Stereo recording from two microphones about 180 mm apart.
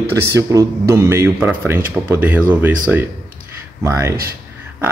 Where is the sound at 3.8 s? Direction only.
15° right (ahead or behind).